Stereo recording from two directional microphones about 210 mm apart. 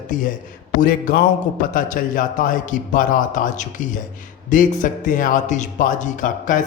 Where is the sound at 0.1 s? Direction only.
40° left (ahead or behind).